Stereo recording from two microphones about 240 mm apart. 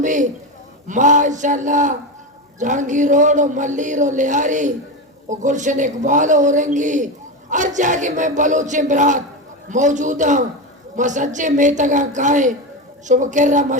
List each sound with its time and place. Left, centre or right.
0.0 s speech: right